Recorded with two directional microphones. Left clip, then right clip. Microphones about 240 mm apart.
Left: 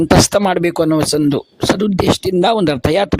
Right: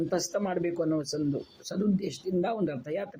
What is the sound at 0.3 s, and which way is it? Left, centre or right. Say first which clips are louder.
Speech: left 16 dB; left.